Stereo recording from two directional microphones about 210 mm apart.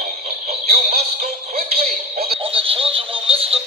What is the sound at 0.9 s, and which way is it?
Music, 40° right (ahead or behind).